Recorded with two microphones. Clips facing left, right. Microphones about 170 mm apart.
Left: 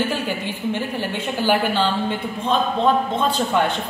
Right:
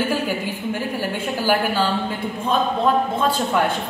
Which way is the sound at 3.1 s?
5° right (ahead or behind).